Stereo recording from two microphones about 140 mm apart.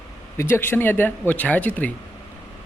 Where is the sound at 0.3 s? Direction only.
15° left (ahead or behind).